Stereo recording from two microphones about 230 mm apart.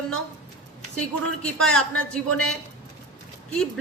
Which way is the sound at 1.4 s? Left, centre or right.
Centre.